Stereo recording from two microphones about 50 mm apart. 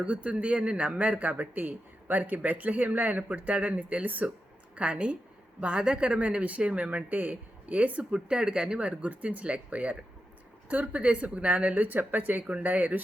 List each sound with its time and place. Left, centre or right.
0.0 s a woman's voice: right
6.1 s speech: right
8.1 s speech: centre